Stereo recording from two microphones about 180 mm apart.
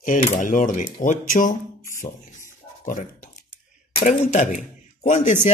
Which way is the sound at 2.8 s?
45° left (ahead or behind).